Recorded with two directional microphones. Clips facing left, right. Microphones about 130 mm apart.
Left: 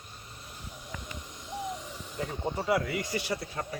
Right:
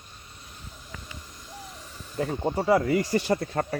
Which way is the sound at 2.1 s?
45° right (ahead or behind).